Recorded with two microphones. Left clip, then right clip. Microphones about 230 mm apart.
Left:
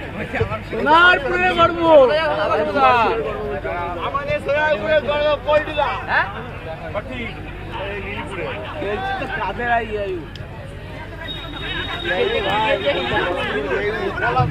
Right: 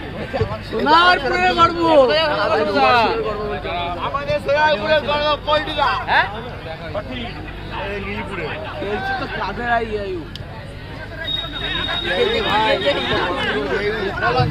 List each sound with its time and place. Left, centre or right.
0.7 s speech: right
3.7 s speech: right
9.4 s speech: right
11.7 s speech: right